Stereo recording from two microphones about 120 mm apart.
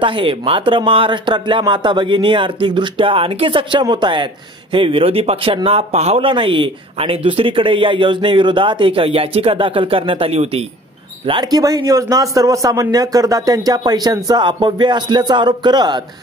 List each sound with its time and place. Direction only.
0.0 s a man's voice: 45° right (ahead or behind)
11.2 s a man's voice: 40° right (ahead or behind)